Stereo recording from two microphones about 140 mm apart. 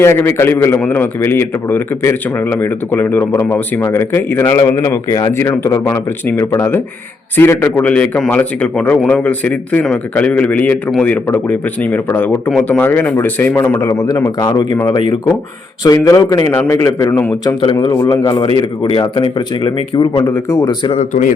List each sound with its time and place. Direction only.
0.0 s a man's voice: 15° left (ahead or behind)
15.8 s a man's voice: 25° left (ahead or behind)
17.4 s speech: 35° left (ahead or behind)
18.2 s a man's voice: 20° left (ahead or behind)
18.8 s speech: 40° left (ahead or behind)
20.9 s speech: 60° left (ahead or behind)